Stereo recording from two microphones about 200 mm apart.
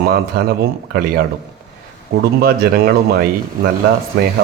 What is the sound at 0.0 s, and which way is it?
A man's voice, 50° right (ahead or behind).